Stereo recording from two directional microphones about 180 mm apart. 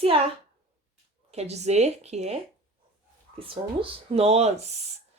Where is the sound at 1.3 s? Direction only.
35° right (ahead or behind).